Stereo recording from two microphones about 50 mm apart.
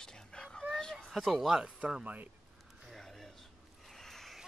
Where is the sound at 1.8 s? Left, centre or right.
Right.